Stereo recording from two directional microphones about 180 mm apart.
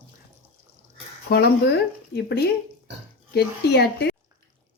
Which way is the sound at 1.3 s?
65° left (ahead or behind).